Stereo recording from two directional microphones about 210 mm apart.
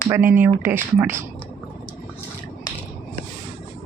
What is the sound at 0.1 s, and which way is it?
A woman's voice, 10° right (ahead or behind).